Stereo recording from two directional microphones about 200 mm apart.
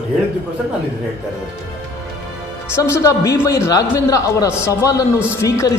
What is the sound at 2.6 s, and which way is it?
A man's voice, 15° left (ahead or behind).